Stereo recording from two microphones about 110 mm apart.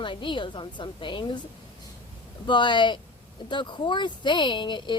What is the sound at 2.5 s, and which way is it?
Speech, 45° left (ahead or behind).